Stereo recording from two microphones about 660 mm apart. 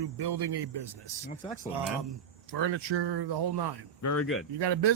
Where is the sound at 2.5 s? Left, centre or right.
Right.